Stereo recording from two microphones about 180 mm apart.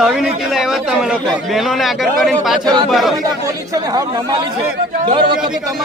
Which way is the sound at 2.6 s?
20° right (ahead or behind).